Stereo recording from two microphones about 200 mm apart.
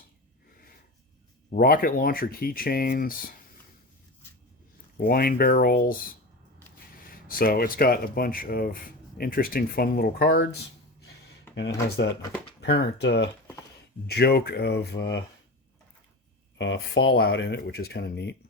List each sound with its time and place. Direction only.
1.5 s speech: 45° left (ahead or behind)
4.9 s speech: 45° left (ahead or behind)
7.3 s speech: 45° left (ahead or behind)
12.6 s speech: 55° left (ahead or behind)
16.6 s speech: 65° left (ahead or behind)